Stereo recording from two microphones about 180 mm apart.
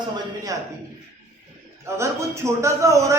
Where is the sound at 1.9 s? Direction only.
15° right (ahead or behind).